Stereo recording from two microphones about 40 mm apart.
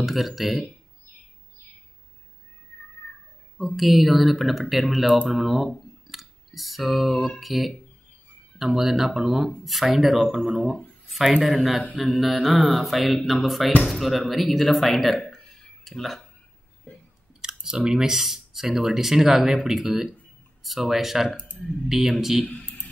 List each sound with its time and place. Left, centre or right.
0.0 s mantra: centre
3.5 s mantra: centre
5.3 s speech: centre
10.3 s mantra: centre
11.1 s speech: centre
12.1 s mantra: centre
15.2 s a sound: centre
17.4 s a sound: centre
17.8 s speech: centre
21.4 s speech: left
21.8 s speech: centre